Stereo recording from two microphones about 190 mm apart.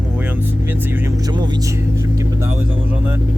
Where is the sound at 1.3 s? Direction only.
20° right (ahead or behind).